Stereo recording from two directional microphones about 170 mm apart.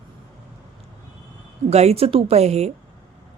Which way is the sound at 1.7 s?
40° right (ahead or behind).